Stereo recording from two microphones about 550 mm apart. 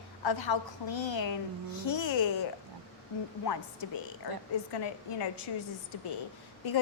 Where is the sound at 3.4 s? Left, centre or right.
Left.